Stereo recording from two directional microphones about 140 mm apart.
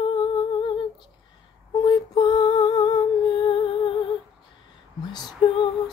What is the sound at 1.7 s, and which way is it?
Music, 30° left (ahead or behind).